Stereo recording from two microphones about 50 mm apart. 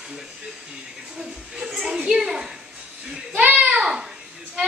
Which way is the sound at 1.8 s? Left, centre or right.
Centre.